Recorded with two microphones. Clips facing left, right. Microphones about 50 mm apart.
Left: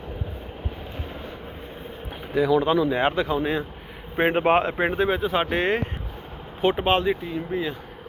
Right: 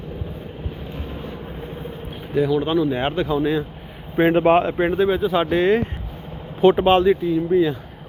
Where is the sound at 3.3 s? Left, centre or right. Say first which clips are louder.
Right 4 dB; left.